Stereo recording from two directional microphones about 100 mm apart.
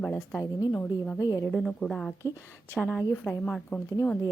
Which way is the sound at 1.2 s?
40° left (ahead or behind).